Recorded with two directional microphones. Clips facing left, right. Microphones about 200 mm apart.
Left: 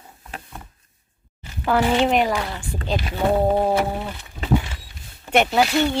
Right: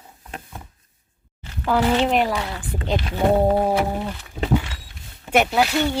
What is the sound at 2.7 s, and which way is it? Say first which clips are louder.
Speech: right 3 dB; 20° right (ahead or behind).